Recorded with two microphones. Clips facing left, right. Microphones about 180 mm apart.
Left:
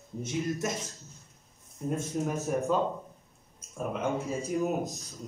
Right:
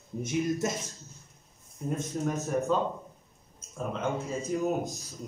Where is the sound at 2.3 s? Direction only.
10° left (ahead or behind).